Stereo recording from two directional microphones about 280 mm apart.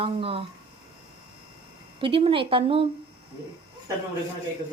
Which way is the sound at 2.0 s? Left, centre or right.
Centre.